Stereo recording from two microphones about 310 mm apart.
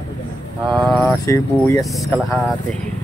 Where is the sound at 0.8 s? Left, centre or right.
Centre.